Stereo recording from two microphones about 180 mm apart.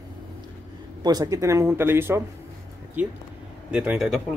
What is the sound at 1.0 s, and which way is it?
Speech, 20° right (ahead or behind).